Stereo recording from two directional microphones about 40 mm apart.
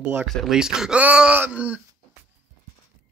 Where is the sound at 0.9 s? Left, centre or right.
Right.